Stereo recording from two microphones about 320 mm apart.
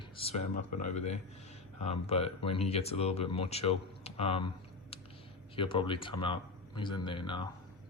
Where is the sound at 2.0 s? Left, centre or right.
Centre.